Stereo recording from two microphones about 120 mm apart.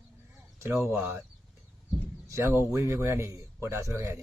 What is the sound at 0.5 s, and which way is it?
Speech, 20° right (ahead or behind).